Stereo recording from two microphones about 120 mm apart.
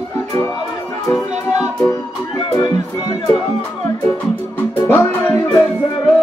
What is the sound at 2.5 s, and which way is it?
Speech, 30° left (ahead or behind).